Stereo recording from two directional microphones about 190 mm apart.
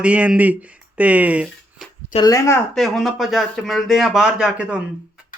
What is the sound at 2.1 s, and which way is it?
Speech, 20° left (ahead or behind).